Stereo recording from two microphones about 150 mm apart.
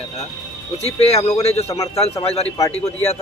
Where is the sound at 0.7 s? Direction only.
45° left (ahead or behind).